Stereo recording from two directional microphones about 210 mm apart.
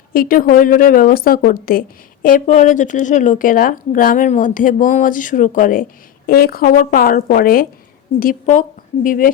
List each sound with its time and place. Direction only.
0.1 s a woman's voice: 40° left (ahead or behind)